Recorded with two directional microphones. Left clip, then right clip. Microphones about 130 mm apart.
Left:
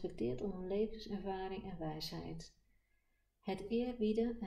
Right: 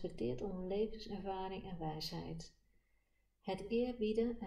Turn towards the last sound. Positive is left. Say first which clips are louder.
# even
turn(degrees=40)  # may be behind; listen again after turning